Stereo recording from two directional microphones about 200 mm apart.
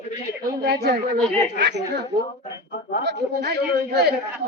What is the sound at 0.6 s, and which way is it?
Speech, 55° right (ahead or behind).